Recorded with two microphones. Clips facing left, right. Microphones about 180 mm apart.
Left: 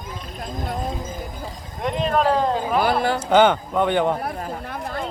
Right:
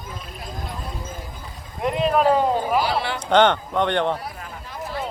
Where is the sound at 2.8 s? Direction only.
50° left (ahead or behind).